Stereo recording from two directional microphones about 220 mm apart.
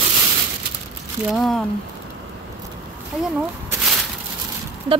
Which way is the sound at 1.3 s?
Centre (ahead or behind).